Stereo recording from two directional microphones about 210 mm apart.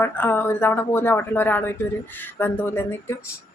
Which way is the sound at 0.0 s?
10° left (ahead or behind).